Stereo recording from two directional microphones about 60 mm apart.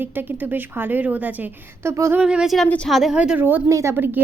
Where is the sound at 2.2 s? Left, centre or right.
Centre.